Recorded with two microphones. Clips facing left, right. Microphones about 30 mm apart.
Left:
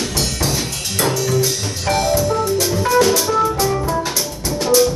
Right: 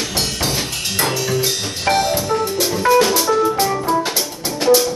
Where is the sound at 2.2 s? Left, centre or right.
Right.